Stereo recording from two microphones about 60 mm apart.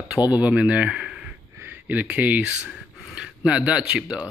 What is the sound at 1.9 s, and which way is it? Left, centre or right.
Speech, right.